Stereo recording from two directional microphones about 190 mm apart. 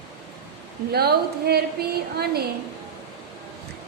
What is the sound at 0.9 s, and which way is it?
Speech, 55° right (ahead or behind).